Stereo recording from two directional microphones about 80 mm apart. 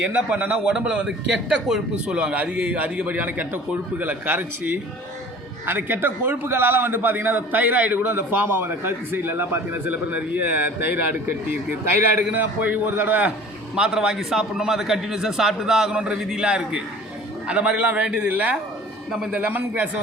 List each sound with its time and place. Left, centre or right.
0.0 s a man's voice: centre
13.7 s a man's voice: centre